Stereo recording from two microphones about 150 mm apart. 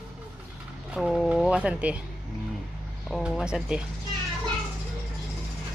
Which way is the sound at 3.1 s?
Centre (ahead or behind).